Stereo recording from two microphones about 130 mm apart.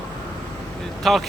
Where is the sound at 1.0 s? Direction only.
Centre (ahead or behind).